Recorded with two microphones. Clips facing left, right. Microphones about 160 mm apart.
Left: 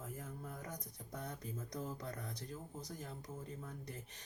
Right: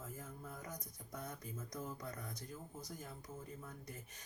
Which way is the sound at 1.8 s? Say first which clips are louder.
Left 2 dB; 30° left (ahead or behind).